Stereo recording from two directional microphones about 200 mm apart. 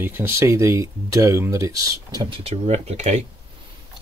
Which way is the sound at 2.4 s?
35° right (ahead or behind).